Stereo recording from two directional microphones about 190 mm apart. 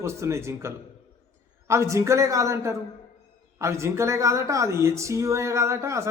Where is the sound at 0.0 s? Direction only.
15° right (ahead or behind).